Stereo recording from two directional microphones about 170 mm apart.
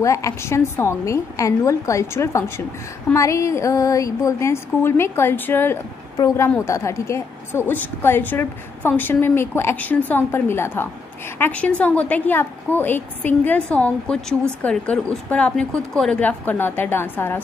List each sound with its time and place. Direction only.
0.0 s a woman's voice: 20° left (ahead or behind)